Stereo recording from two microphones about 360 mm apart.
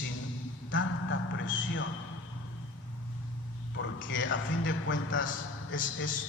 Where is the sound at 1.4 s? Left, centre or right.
Left.